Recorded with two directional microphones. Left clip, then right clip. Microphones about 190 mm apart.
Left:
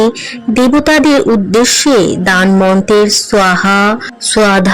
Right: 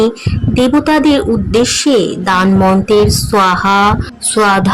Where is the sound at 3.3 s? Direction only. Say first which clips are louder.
Even; 15° left (ahead or behind).